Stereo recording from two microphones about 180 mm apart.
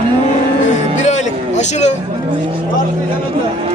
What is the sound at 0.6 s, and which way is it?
Music, 40° left (ahead or behind).